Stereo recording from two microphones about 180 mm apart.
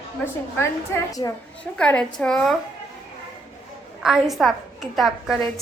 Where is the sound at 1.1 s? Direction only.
20° left (ahead or behind).